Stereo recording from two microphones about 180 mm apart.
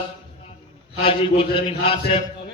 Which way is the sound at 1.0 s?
30° left (ahead or behind).